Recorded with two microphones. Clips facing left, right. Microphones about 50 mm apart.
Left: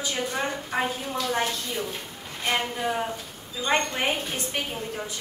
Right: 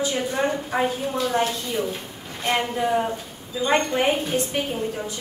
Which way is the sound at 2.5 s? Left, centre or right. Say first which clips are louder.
Right 5 dB; centre.